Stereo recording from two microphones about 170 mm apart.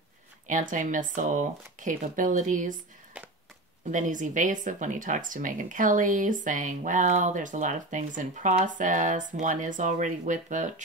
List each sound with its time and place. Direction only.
0.5 s speech: 50° right (ahead or behind)
3.1 s a sound: 10° right (ahead or behind)
3.9 s speech: 50° right (ahead or behind)